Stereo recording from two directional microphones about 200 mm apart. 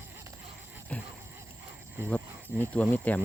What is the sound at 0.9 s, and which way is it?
Dog, 5° left (ahead or behind).